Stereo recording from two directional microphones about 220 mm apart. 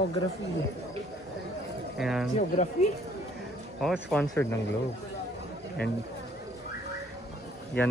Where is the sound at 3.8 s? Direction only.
Centre (ahead or behind).